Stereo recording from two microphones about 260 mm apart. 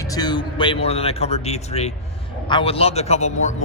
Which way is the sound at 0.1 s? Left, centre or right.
Centre.